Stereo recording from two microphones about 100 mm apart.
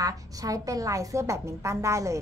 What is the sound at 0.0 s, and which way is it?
A woman's voice, 35° right (ahead or behind).